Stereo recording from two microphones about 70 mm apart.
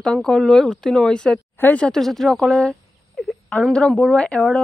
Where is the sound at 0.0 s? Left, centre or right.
Centre.